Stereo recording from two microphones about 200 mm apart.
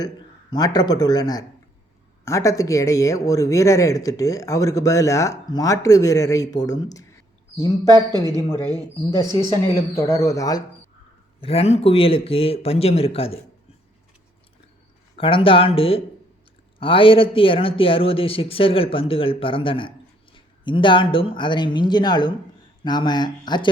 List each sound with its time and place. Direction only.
0.5 s speech: 20° left (ahead or behind)
7.9 s a man's voice: 20° right (ahead or behind)
9.9 s speech: 15° left (ahead or behind)
11.3 s speech: 30° left (ahead or behind)
15.1 s speech: 25° left (ahead or behind)